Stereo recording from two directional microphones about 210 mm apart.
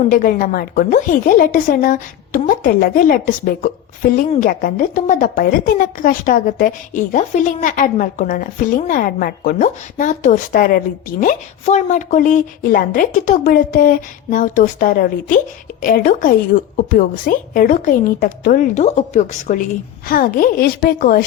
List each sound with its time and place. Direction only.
0.0 s a woman's voice: 40° left (ahead or behind)